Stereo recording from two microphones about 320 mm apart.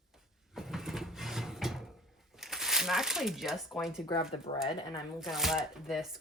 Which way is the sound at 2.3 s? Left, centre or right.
Centre.